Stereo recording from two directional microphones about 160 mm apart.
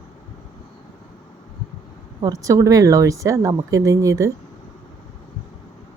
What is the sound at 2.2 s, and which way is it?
Speech, 20° right (ahead or behind).